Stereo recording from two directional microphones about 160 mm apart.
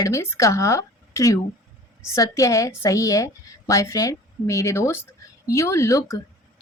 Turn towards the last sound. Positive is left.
turn(degrees=20)  # may be behind; listen again after turning